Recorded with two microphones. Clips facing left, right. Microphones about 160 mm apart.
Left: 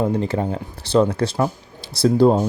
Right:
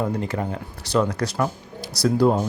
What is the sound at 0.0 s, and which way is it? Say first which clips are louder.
Speech: left 4 dB; 30° left (ahead or behind).